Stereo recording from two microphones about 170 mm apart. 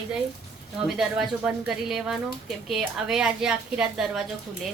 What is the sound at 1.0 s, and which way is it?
A woman's voice, 5° right (ahead or behind).